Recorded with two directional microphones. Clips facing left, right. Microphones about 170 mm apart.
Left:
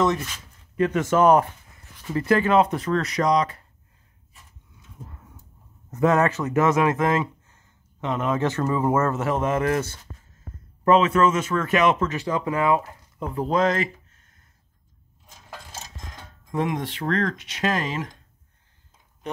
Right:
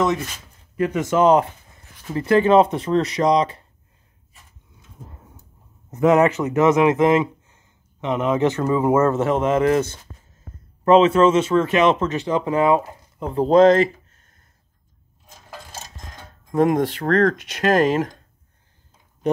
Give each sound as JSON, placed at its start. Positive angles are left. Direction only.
{"t": 0.7, "sound": "speech", "side_deg": -15}
{"t": 2.3, "sound": "speech", "side_deg": -25}
{"t": 5.9, "sound": "speech", "side_deg": -20}
{"t": 16.5, "sound": "speech", "side_deg": -45}